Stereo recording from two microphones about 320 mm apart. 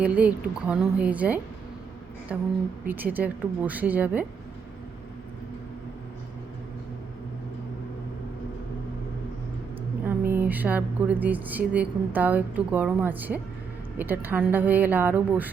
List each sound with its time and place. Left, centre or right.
0.0 s speech: centre
10.1 s speech: centre